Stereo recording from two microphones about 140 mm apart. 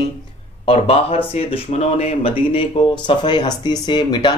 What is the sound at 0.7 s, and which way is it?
Speech, 45° left (ahead or behind).